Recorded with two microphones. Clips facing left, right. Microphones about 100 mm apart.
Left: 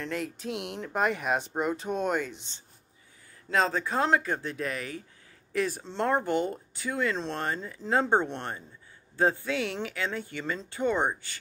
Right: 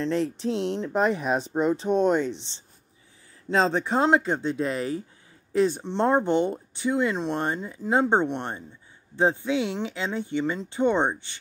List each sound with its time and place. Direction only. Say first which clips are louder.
0.0 s speech: right 8 dB; 30° right (ahead or behind)
3.4 s speech: right 4 dB; 25° right (ahead or behind)